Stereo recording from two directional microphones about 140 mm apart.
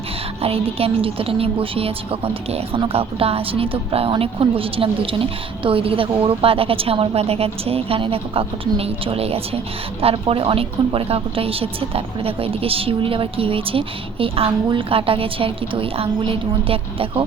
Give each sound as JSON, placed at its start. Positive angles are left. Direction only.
{"t": 0.4, "sound": "a woman's voice", "side_deg": -45}